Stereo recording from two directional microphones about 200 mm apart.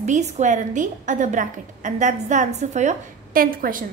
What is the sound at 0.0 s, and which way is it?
A woman's voice, 35° right (ahead or behind).